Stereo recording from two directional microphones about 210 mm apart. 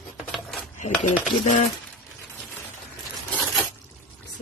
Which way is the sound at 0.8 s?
35° left (ahead or behind).